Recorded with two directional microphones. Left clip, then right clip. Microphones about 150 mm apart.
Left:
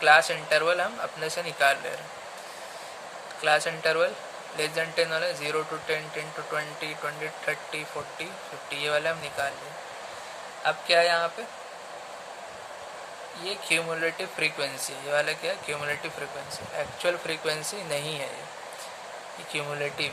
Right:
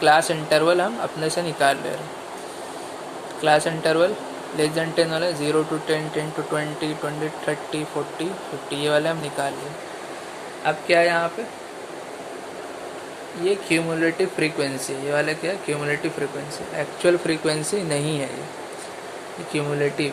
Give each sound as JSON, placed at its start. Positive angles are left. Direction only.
{"t": 0.0, "sound": "speech", "side_deg": 15}
{"t": 3.4, "sound": "speech", "side_deg": 20}
{"t": 8.7, "sound": "speech", "side_deg": 15}
{"t": 10.6, "sound": "speech", "side_deg": 25}
{"t": 13.4, "sound": "speech", "side_deg": 25}
{"t": 19.5, "sound": "speech", "side_deg": 20}